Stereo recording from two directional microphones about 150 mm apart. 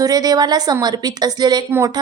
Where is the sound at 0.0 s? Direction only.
25° right (ahead or behind).